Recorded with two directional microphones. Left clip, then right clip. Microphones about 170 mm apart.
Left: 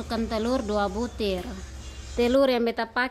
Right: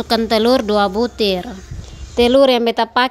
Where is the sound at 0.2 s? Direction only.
40° right (ahead or behind).